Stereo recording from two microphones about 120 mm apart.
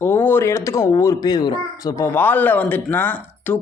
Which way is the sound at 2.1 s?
15° left (ahead or behind).